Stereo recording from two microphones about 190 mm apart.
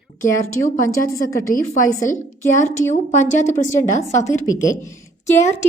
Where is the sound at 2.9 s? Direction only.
40° left (ahead or behind).